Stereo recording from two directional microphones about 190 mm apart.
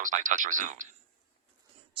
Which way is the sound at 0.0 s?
45° right (ahead or behind).